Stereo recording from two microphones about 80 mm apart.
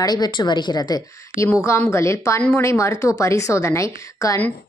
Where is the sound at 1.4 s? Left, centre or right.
Left.